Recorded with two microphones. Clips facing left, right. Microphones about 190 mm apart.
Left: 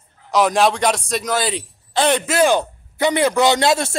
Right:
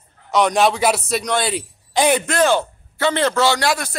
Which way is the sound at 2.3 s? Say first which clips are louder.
Left 1 dB; 10° left (ahead or behind).